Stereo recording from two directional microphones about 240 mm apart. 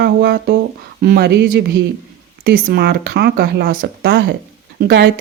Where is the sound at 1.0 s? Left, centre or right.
Right.